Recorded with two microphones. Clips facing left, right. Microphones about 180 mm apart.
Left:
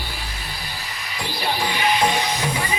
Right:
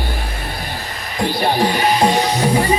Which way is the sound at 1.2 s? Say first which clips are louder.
Right 9 dB; 45° right (ahead or behind).